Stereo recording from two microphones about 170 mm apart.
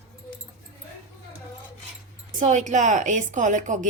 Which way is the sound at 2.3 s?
45° right (ahead or behind).